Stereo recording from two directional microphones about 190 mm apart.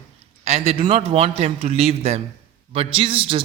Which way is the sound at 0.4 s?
35° right (ahead or behind).